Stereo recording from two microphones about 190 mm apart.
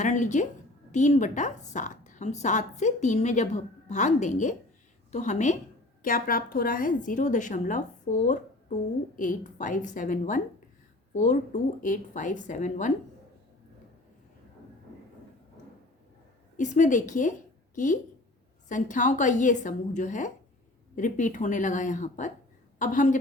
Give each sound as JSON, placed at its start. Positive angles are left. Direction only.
{"t": 0.0, "sound": "a woman's voice", "side_deg": 40}
{"t": 16.6, "sound": "a woman's voice", "side_deg": 40}